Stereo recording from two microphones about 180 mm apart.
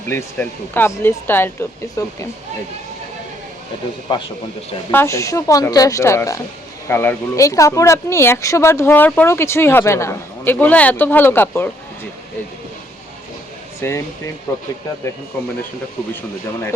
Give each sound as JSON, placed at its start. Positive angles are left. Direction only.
{"t": 0.1, "sound": "speech", "side_deg": 10}
{"t": 4.1, "sound": "a man's voice", "side_deg": 25}
{"t": 4.9, "sound": "speech", "side_deg": 15}
{"t": 13.8, "sound": "speech", "side_deg": 15}